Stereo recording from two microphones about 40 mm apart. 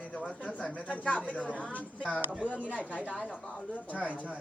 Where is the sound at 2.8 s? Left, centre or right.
Right.